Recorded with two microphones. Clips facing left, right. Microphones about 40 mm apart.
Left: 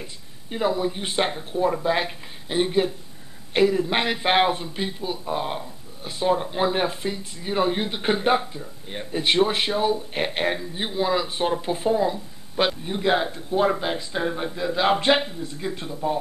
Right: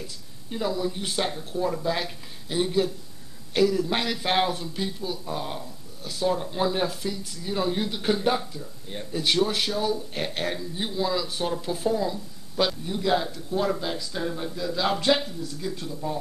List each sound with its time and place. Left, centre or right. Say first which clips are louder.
0.0 s speech: left 1 dB; left